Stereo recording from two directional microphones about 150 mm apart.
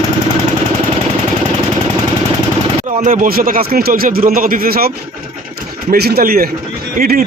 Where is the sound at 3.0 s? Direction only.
60° right (ahead or behind); by 4.9 s 85° right.